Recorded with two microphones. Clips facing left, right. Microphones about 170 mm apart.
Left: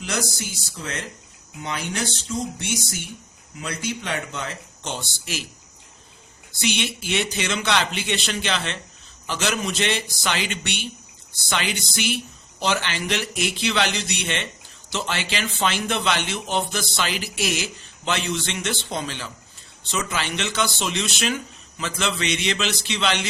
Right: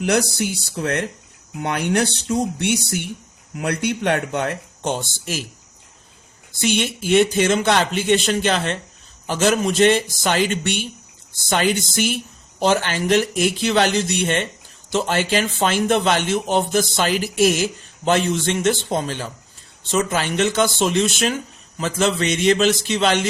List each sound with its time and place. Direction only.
0.0 s speech: 65° right (ahead or behind); by 5.5 s 45° right (ahead or behind)
6.6 s a man's voice: 45° right (ahead or behind)